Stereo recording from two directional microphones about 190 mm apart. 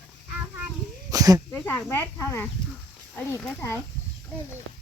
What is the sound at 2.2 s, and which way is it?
Speech, 10° left (ahead or behind).